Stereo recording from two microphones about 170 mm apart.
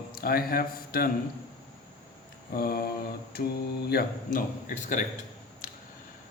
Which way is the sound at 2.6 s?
65° left (ahead or behind).